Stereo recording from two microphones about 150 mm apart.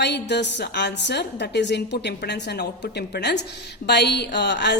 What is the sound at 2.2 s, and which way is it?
A woman's voice, 90° left.